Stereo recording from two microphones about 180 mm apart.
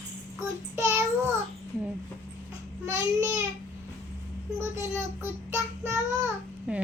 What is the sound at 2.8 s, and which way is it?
Speech, 15° right (ahead or behind).